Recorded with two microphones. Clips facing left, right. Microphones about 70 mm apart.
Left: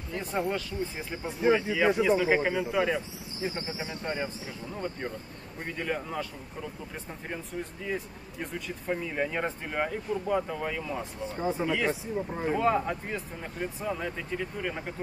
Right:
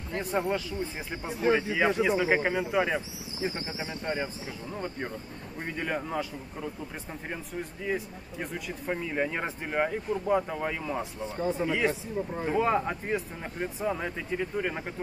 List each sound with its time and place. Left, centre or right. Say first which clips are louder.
0.2 s speech: right 2 dB; centre
4.0 s speech: right 2 dB; centre
7.8 s speech: right 5 dB; centre
11.3 s speech: right 1 dB; centre
11.6 s speech: right 1 dB; centre
12.2 s speech: even; centre
12.5 s speech: right 1 dB; centre